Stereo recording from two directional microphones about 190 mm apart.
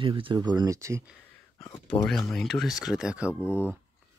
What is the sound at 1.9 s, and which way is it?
Speech, 5° left (ahead or behind).